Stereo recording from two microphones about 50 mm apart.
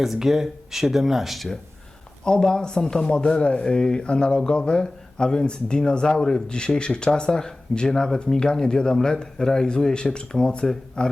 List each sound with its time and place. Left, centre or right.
0.0 s speech: centre
2.2 s speech: centre